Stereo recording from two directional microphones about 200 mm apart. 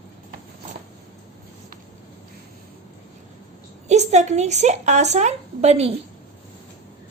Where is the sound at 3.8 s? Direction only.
35° right (ahead or behind).